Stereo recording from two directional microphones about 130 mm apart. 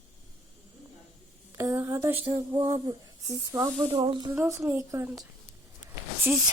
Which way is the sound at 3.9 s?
40° right (ahead or behind).